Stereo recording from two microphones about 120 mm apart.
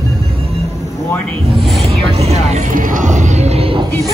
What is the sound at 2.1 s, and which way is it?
Music, 65° right (ahead or behind).